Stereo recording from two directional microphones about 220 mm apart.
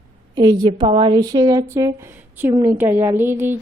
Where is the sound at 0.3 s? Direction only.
20° right (ahead or behind).